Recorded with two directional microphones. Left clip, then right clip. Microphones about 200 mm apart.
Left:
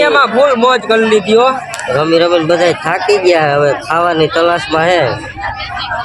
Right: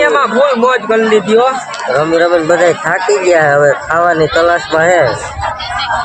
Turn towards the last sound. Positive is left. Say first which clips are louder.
# right 2 dB
turn(degrees=5)  # may be behind; listen again after turning